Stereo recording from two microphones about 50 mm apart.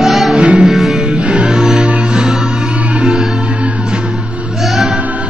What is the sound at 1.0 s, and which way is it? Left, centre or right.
Music, right.